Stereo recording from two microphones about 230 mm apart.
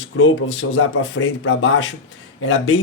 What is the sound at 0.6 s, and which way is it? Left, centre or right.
Speech, left.